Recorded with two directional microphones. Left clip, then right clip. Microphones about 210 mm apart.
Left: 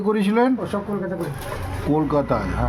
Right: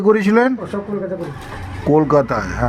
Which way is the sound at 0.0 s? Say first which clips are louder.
Right 6 dB; 30° right (ahead or behind).